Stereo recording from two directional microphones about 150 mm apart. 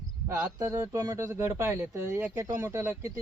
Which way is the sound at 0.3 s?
20° right (ahead or behind).